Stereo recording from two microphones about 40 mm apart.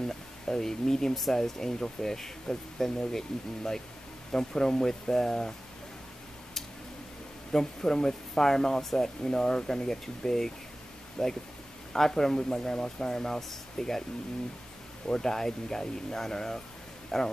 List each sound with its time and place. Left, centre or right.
0.0 s speech: centre
7.5 s speech: centre
15.0 s speech: centre